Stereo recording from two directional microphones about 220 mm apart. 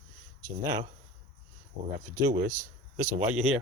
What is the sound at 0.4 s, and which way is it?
Speech, 15° right (ahead or behind).